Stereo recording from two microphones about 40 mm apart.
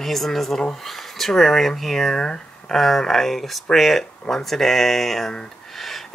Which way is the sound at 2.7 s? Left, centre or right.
Centre.